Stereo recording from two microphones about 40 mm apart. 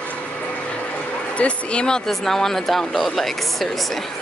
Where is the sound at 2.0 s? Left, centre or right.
Centre.